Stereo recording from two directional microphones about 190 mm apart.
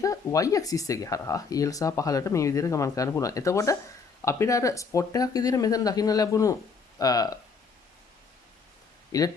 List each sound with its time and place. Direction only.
0.0 s speech: 15° left (ahead or behind)
9.1 s speech: 20° left (ahead or behind)